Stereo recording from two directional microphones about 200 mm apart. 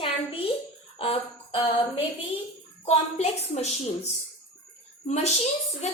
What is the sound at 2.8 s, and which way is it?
A woman's voice, 30° left (ahead or behind).